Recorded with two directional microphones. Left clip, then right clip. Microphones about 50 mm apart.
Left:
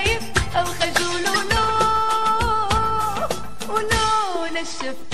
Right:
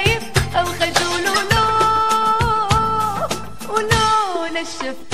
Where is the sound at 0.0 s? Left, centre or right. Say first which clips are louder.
Right 3 dB; left.